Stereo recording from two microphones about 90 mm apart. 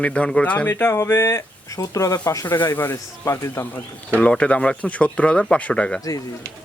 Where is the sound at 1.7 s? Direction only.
40° left (ahead or behind).